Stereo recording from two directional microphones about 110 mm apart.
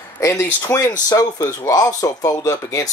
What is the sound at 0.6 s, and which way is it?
Speech, 35° left (ahead or behind).